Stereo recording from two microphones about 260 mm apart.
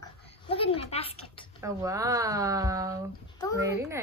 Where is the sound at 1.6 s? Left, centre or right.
Centre.